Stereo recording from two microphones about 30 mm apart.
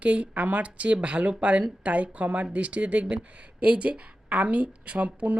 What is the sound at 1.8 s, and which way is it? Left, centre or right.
Speech, right.